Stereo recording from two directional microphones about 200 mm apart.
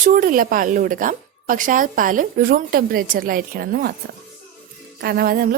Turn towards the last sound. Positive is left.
turn(degrees=-50)  # may be behind; listen again after turning